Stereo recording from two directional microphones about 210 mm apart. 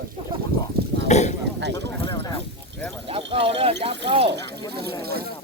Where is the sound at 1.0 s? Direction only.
35° left (ahead or behind).